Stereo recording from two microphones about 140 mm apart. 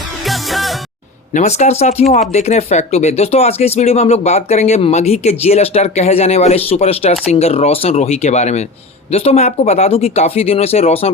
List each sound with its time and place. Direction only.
0.3 s music: centre (ahead or behind)
1.3 s speech: 55° left (ahead or behind)